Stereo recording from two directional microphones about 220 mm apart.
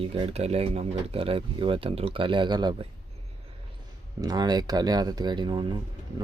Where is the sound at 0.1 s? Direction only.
30° right (ahead or behind).